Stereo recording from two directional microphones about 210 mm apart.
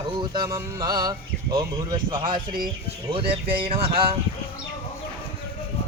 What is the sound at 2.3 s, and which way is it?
Speech, 45° right (ahead or behind).